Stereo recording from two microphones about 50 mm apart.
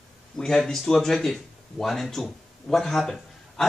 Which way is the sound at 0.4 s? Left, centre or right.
Centre.